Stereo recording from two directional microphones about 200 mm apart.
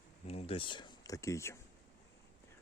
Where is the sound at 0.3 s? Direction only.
30° left (ahead or behind).